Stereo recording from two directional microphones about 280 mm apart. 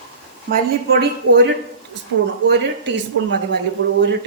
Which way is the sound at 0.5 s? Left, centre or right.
Right.